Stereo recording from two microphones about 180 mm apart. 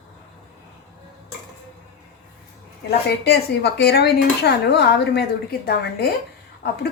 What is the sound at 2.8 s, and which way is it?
Speech, 60° left (ahead or behind).